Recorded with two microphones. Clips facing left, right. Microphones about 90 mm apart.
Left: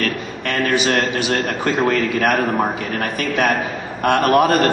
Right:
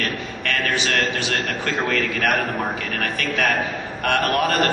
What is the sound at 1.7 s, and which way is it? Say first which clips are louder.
Speech: left 6 dB; 15° left (ahead or behind).